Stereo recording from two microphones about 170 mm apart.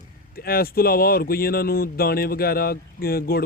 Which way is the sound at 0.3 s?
60° left (ahead or behind).